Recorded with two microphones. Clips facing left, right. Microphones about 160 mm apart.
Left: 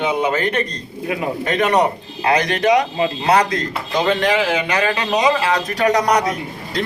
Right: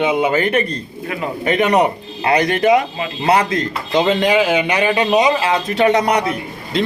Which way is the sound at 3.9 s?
20° right (ahead or behind).